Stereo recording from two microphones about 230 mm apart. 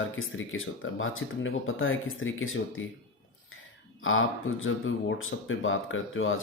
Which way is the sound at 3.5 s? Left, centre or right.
Left.